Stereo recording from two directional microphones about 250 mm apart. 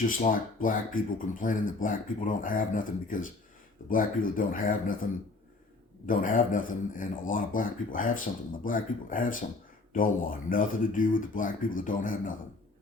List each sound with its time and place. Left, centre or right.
0.0 s speech: left
6.1 s speech: left